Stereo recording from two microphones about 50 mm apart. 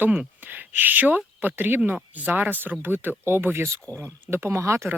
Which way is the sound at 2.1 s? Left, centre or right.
Right.